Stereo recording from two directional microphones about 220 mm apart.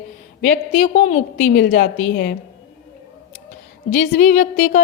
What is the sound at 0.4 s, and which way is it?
A woman's voice, 35° left (ahead or behind).